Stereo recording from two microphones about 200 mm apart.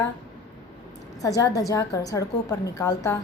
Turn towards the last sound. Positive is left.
turn(degrees=15)  # may be behind; listen again after turning